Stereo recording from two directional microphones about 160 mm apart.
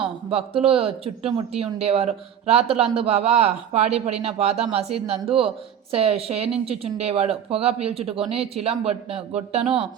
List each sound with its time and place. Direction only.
0.0 s speech: 35° right (ahead or behind)